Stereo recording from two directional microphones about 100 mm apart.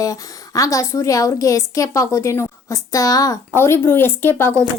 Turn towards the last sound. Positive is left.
turn(degrees=25)  # may be behind; listen again after turning